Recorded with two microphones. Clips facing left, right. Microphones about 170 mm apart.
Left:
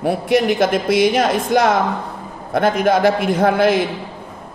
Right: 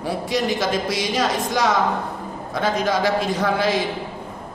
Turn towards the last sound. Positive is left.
turn(degrees=55)  # may be behind; listen again after turning